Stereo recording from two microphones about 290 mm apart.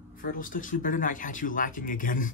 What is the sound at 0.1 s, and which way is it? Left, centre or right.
Speech, left.